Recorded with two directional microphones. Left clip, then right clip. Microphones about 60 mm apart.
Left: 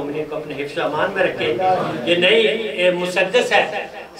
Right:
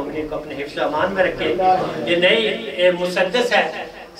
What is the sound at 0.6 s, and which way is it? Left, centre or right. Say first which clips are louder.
A man's voice: even; centre.